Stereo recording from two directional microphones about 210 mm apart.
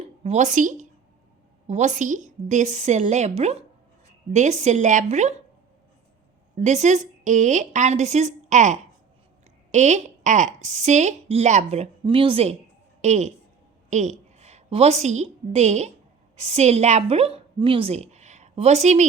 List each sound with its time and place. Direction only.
0.2 s a woman's voice: 30° right (ahead or behind)
6.6 s a woman's voice: 35° right (ahead or behind)
13.9 s a sound: 35° right (ahead or behind)
15.0 s a woman's voice: 35° right (ahead or behind)